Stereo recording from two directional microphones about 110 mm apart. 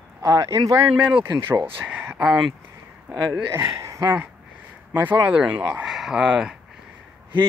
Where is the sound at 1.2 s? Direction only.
55° right (ahead or behind).